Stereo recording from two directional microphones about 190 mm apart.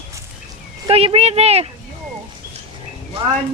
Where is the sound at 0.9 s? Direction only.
30° right (ahead or behind).